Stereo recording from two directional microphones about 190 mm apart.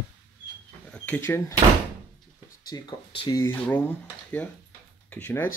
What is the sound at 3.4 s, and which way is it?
Speech, 10° left (ahead or behind).